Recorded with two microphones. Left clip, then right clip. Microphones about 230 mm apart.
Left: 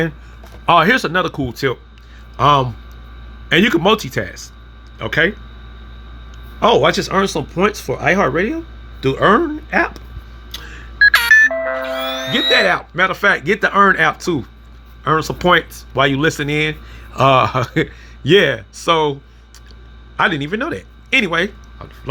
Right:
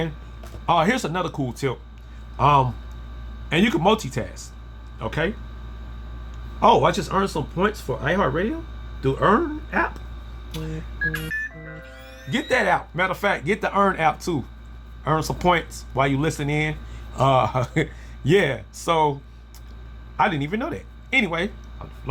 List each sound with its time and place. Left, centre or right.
0.6 s speech: centre
6.6 s speech: centre
11.1 s music: left
12.3 s speech: centre
20.1 s speech: centre